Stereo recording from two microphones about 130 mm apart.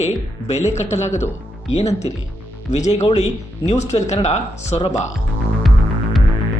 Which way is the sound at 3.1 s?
60° left (ahead or behind).